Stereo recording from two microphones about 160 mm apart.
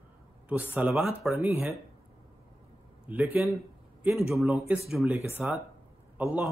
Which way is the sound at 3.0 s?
10° right (ahead or behind).